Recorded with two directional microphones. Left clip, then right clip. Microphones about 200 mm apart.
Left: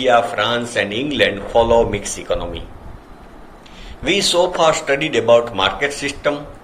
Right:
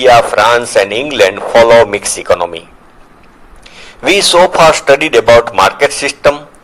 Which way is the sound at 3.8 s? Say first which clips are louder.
Right 8 dB; 55° right (ahead or behind).